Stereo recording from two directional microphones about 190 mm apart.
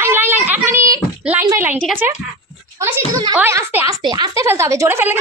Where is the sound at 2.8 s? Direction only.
15° right (ahead or behind).